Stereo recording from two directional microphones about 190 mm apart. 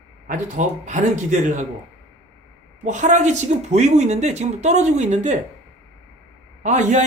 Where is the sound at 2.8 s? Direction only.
40° right (ahead or behind).